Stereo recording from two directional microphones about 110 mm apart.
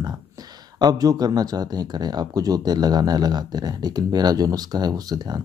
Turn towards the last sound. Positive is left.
turn(degrees=-35)  # may be behind; listen again after turning